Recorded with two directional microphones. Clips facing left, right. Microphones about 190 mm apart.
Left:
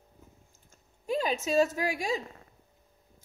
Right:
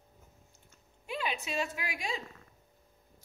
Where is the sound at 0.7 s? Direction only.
40° left (ahead or behind).